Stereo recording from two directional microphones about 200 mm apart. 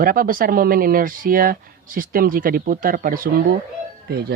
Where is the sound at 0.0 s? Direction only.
45° right (ahead or behind).